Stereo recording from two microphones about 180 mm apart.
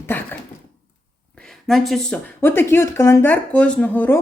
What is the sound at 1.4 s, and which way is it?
Speech, centre (ahead or behind).